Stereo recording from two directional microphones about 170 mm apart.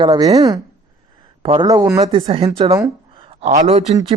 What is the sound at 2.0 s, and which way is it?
A man's voice, 35° right (ahead or behind).